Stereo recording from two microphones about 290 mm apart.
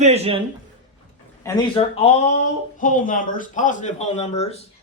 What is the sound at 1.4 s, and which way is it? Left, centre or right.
Speech, centre.